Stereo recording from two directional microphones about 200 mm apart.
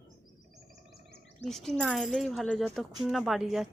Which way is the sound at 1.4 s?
Centre (ahead or behind).